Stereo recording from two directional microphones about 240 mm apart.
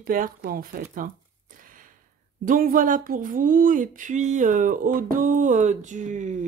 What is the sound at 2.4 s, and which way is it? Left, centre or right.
Speech, right.